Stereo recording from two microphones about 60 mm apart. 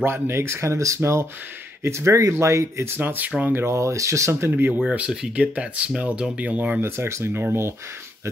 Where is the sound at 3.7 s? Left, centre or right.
Right.